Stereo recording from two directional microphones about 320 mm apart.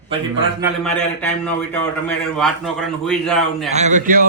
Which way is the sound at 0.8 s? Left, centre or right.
Centre.